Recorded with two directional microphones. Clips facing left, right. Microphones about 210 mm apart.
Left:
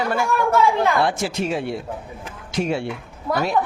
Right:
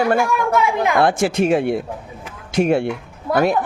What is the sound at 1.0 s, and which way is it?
Speech, 50° right (ahead or behind).